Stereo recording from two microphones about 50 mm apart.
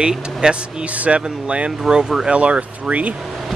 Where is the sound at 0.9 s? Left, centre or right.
Right.